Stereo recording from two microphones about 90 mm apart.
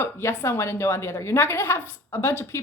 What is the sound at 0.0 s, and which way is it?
A woman's voice, 30° left (ahead or behind).